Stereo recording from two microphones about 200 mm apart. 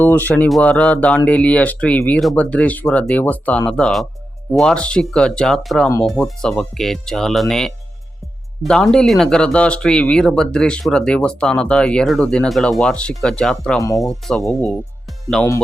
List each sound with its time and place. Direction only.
0.0 s speech: 10° left (ahead or behind)